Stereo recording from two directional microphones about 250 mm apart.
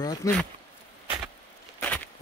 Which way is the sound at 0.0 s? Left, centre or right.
Centre.